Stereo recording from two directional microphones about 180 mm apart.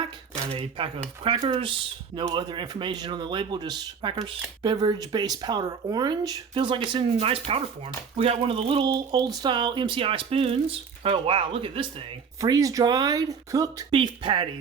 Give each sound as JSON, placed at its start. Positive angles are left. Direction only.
{"t": 0.5, "sound": "speech", "side_deg": -30}